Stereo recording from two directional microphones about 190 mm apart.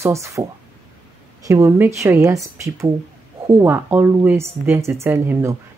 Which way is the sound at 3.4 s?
10° right (ahead or behind).